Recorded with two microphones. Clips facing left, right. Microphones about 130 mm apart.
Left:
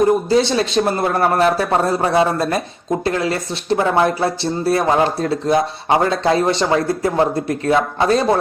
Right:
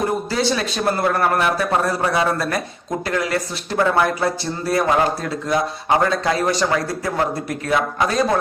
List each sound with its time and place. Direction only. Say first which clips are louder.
0.3 s speech: left 5 dB; 25° left (ahead or behind)